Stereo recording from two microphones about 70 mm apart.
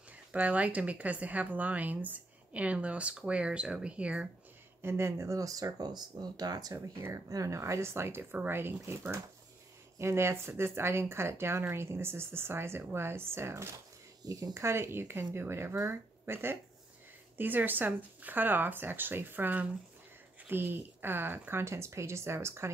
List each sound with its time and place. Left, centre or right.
0.1 s speech: centre
4.8 s speech: right
7.0 s speech: right
14.2 s speech: right
14.5 s speech: right